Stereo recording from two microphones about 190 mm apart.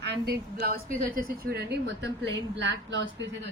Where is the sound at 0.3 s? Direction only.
50° right (ahead or behind).